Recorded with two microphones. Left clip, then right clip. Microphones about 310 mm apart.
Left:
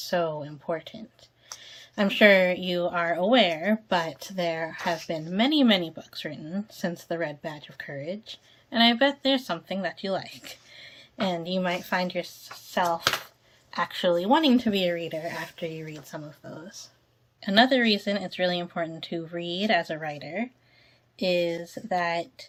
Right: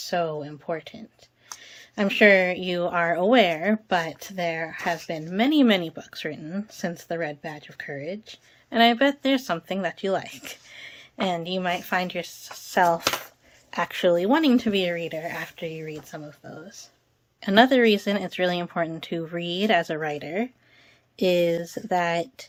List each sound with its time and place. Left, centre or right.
0.1 s a woman's voice: centre
17.4 s a woman's voice: centre